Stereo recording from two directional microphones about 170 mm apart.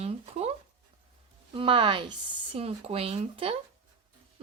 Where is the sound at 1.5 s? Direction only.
30° right (ahead or behind).